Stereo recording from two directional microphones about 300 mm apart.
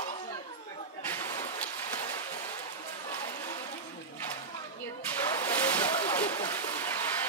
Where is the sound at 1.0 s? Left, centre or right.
Centre.